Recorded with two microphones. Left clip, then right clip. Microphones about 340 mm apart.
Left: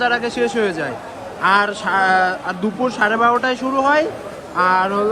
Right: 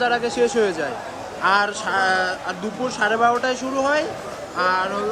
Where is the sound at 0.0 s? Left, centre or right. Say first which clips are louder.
Left 2 dB; centre.